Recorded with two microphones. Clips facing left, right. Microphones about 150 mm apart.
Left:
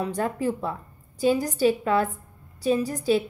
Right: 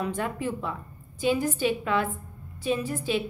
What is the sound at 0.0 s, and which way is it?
A woman's voice, 40° left (ahead or behind).